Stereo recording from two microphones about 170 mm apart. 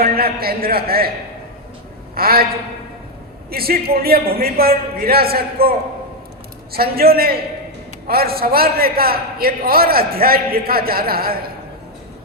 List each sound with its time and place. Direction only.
0.0 s a man's voice: 65° right (ahead or behind)
2.1 s a man's voice: 60° right (ahead or behind)
3.5 s a man's voice: 65° right (ahead or behind)
6.7 s a man's voice: 65° right (ahead or behind)